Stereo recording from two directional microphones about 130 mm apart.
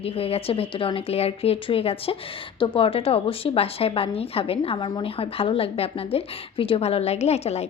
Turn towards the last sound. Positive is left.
turn(degrees=55)  # may be behind; listen again after turning